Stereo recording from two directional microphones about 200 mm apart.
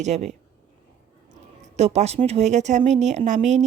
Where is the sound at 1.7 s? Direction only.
35° right (ahead or behind).